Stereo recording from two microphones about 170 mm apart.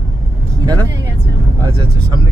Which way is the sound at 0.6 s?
25° right (ahead or behind).